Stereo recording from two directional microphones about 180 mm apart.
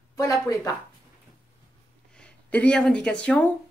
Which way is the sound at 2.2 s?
5° left (ahead or behind).